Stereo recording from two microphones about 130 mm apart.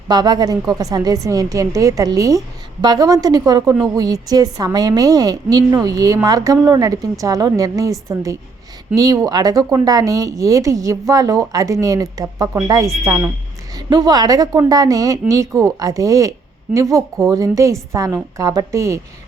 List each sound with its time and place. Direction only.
0.1 s speech: 30° right (ahead or behind)